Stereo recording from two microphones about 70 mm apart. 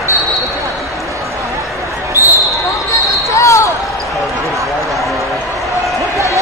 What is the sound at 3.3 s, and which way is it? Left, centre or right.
Basketball bounce, left.